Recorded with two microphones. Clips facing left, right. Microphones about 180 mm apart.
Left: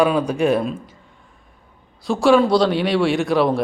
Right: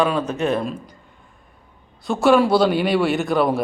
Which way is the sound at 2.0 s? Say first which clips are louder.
Left 1 dB; centre (ahead or behind).